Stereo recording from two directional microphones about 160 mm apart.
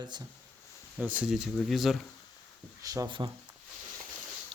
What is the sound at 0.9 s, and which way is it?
Speech, 10° right (ahead or behind).